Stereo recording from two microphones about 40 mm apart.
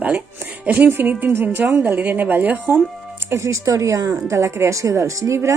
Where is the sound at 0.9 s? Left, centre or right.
Right.